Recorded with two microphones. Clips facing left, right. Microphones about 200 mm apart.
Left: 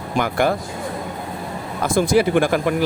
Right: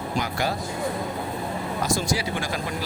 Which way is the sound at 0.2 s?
55° left (ahead or behind).